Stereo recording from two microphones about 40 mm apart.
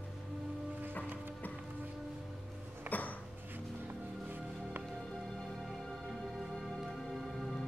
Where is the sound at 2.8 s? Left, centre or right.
Left.